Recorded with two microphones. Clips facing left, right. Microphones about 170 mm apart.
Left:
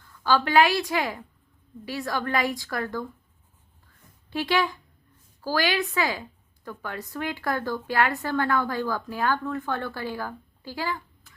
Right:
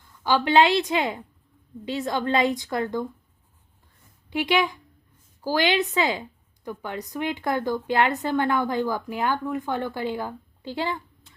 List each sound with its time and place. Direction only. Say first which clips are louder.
0.2 s a woman's voice: right 1 dB; 20° right (ahead or behind)
4.3 s a woman's voice: right 2 dB; 15° right (ahead or behind)